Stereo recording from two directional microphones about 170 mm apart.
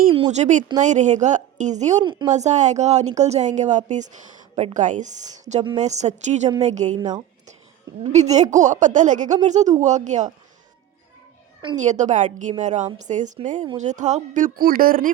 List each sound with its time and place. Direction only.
0.1 s speech: 40° right (ahead or behind)
2.0 s a woman's voice: 25° right (ahead or behind)
2.3 s speech: 45° right (ahead or behind)
8.0 s speech: 45° right (ahead or behind)
11.8 s speech: 45° right (ahead or behind)